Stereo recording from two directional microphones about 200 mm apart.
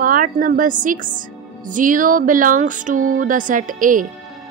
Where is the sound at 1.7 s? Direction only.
40° right (ahead or behind).